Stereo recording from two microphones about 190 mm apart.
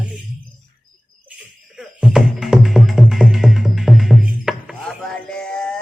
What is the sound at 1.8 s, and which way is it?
Music, 5° right (ahead or behind).